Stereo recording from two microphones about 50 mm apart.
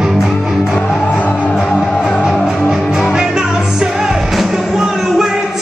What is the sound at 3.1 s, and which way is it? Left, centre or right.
Music, centre.